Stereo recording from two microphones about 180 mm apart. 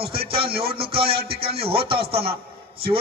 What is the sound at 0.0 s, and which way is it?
Music, 60° right (ahead or behind).